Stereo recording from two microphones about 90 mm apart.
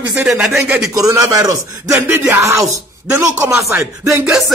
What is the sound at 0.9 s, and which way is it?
Speech, 40° right (ahead or behind).